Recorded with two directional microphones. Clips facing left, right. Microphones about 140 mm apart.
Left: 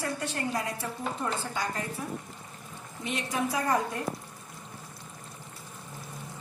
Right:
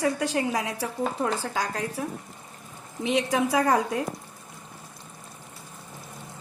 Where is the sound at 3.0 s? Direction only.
90° right.